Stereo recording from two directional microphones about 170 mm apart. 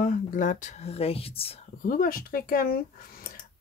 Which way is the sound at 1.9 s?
60° left (ahead or behind).